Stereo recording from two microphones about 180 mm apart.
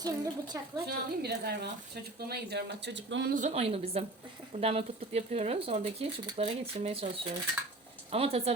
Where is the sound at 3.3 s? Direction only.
40° right (ahead or behind).